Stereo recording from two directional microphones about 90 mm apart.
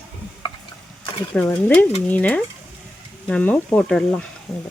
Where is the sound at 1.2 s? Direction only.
20° left (ahead or behind).